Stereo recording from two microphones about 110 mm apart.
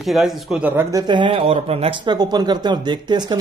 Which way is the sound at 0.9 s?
35° right (ahead or behind).